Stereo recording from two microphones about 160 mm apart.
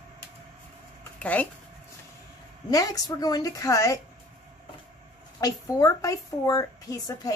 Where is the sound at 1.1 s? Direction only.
10° left (ahead or behind).